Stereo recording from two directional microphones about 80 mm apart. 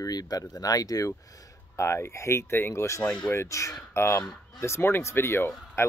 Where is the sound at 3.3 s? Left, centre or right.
Left.